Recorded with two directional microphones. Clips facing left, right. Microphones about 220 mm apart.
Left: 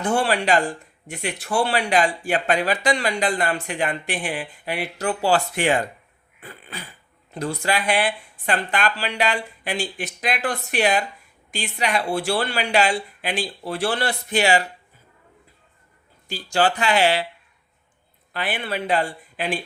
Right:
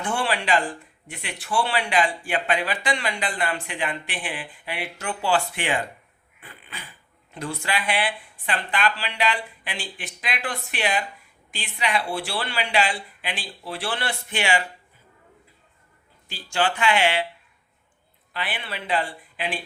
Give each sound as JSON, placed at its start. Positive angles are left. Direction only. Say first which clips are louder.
{"t": 0.0, "sound": "speech", "louder": "left 5 dB", "side_deg": 40}
{"t": 6.4, "sound": "dog", "louder": "left 5 dB", "side_deg": 40}
{"t": 7.3, "sound": "speech", "louder": "left 4 dB", "side_deg": 40}
{"t": 16.3, "sound": "speech", "louder": "left 4 dB", "side_deg": 40}
{"t": 18.3, "sound": "speech", "louder": "left 6 dB", "side_deg": 45}